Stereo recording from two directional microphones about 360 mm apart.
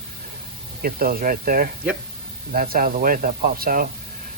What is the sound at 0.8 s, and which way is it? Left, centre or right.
Speech, right.